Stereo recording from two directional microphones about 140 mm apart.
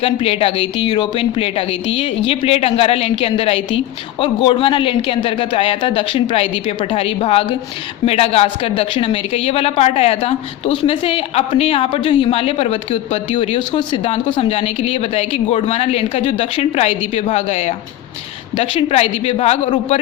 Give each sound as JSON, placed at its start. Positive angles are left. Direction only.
{"t": 0.0, "sound": "a woman's voice", "side_deg": 45}